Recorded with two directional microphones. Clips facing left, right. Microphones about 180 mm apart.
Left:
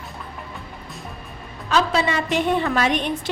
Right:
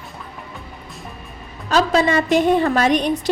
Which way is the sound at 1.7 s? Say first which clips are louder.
Right 4 dB; 45° right (ahead or behind).